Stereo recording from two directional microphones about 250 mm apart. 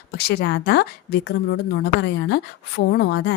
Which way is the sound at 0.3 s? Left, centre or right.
Left.